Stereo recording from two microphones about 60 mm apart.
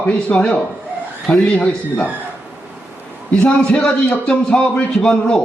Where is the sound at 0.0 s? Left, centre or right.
Left.